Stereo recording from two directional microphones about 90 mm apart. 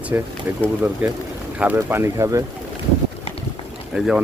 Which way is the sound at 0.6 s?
20° right (ahead or behind).